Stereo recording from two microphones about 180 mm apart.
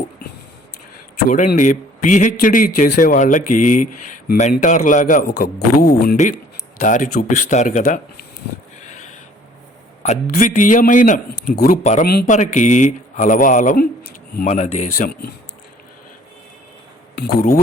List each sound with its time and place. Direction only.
1.3 s a man's voice: 45° left (ahead or behind)
6.7 s a man's voice: 45° left (ahead or behind)
10.0 s a man's voice: 40° left (ahead or behind)
11.3 s a man's voice: 60° left (ahead or behind); by 12.0 s 40° left (ahead or behind)
12.0 s a man's voice: 55° left (ahead or behind)
14.5 s speech: 40° left (ahead or behind)